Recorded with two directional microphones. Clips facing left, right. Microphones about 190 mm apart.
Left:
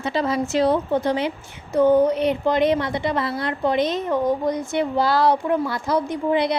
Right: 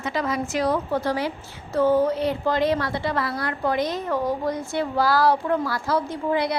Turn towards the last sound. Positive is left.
turn(degrees=20)  # may be behind; listen again after turning